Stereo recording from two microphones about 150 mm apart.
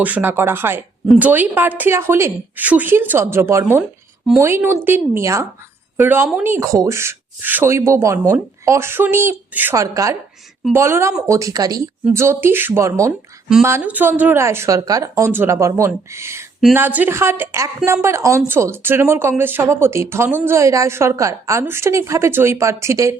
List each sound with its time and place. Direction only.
0.0 s speech: 10° right (ahead or behind)